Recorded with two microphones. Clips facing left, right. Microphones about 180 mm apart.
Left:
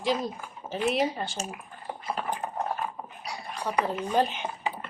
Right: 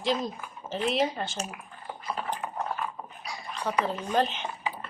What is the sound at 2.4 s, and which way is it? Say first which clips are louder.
Horse: left 2 dB; 40° left (ahead or behind).